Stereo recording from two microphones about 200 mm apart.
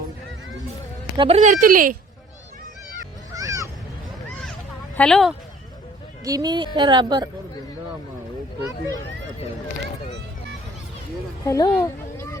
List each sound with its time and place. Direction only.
1.1 s speech: 25° right (ahead or behind)
1.4 s speech: 40° right (ahead or behind)
3.3 s a sound: 15° right (ahead or behind)
4.9 s speech: 5° left (ahead or behind)
6.2 s a woman's voice: 20° right (ahead or behind)
11.4 s speech: 20° left (ahead or behind)